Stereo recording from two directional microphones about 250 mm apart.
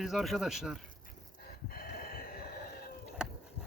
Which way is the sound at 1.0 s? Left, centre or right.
Left.